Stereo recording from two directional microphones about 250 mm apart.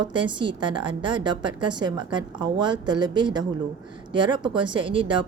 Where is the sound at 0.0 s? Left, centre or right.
Centre.